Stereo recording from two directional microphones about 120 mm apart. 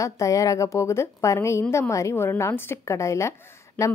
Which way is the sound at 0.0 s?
25° left (ahead or behind).